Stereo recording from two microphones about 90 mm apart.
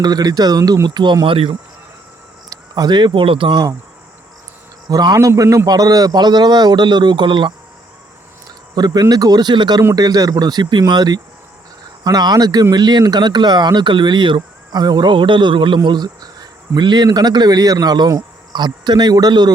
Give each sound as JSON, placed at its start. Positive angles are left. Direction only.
{"t": 0.0, "sound": "a man's voice", "side_deg": -50}
{"t": 2.5, "sound": "cricket", "side_deg": -50}
{"t": 3.1, "sound": "speech", "side_deg": -75}
{"t": 3.5, "sound": "a man's voice", "side_deg": -45}
{"t": 4.9, "sound": "a man's voice", "side_deg": -45}
{"t": 8.7, "sound": "a man's voice", "side_deg": -50}